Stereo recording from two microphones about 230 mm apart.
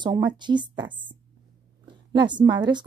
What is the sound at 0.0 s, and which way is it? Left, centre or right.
A woman's voice, centre.